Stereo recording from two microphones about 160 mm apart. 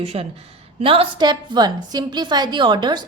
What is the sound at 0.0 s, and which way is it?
A woman's voice, 40° right (ahead or behind).